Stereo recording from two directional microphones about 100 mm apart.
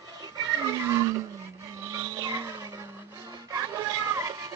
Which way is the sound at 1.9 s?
35° right (ahead or behind).